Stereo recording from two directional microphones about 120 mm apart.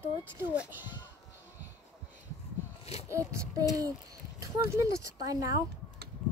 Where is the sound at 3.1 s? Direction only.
25° right (ahead or behind).